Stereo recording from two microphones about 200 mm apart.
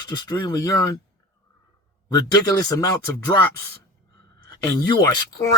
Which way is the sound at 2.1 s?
15° left (ahead or behind).